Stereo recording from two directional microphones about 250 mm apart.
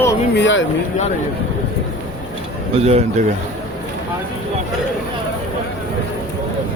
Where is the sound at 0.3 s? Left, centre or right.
Left.